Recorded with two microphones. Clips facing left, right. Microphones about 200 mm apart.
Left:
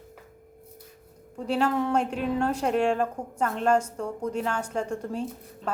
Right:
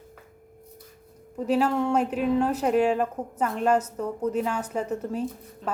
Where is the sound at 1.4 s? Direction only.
5° right (ahead or behind).